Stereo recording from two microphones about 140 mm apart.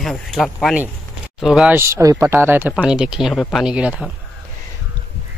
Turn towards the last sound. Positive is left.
turn(degrees=-10)  # may be behind; listen again after turning